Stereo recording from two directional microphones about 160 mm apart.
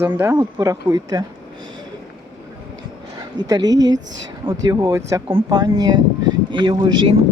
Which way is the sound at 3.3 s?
25° right (ahead or behind).